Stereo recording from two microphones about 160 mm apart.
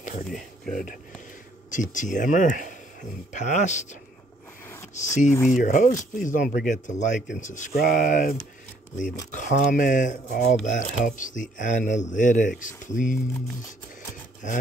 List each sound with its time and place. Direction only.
0.3 s speech: 5° left (ahead or behind)
1.7 s speech: 50° left (ahead or behind)
4.9 s speech: 50° left (ahead or behind)
7.7 s speech: 65° left (ahead or behind)